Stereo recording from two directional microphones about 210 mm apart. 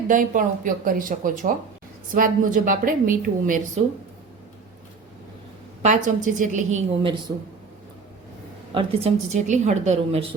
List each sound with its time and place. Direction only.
0.1 s a woman's voice: 40° right (ahead or behind)
5.8 s a woman's voice: 35° right (ahead or behind)
8.7 s a woman's voice: 30° right (ahead or behind)